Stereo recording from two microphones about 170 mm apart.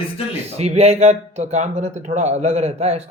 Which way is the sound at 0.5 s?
40° right (ahead or behind).